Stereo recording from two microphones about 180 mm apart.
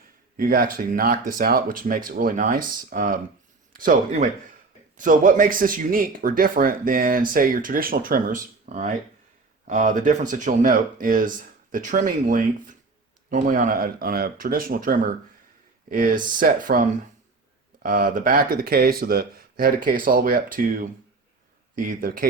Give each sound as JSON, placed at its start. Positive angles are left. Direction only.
{"t": 0.3, "sound": "speech", "side_deg": -50}
{"t": 17.8, "sound": "speech", "side_deg": -50}